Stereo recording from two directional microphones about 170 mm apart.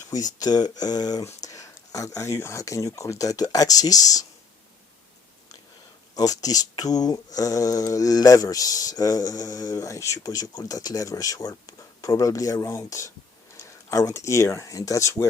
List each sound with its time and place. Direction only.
0.3 s speech: 25° left (ahead or behind)
6.1 s speech: 20° left (ahead or behind)